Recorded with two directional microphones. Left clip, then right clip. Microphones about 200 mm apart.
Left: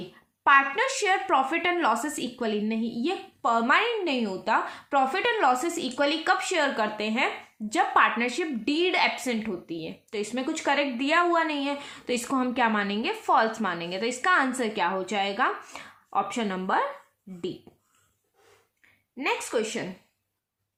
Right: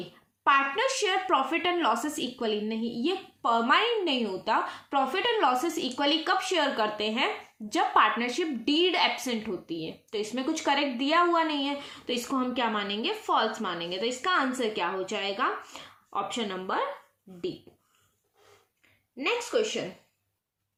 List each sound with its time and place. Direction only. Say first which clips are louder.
0.4 s a woman's voice: left 3 dB; 30° left (ahead or behind)
19.1 s a woman's voice: even; 35° left (ahead or behind)